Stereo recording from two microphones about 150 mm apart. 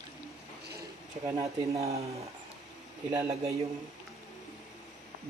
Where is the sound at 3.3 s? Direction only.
40° right (ahead or behind).